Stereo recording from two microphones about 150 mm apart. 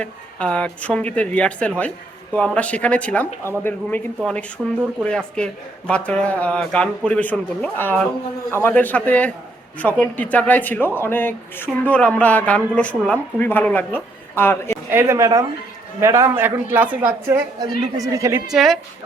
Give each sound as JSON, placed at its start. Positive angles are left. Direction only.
{"t": 0.0, "sound": "speech", "side_deg": 5}
{"t": 4.6, "sound": "speech", "side_deg": 0}
{"t": 14.8, "sound": "a woman's voice", "side_deg": -15}
{"t": 18.5, "sound": "speech", "side_deg": 0}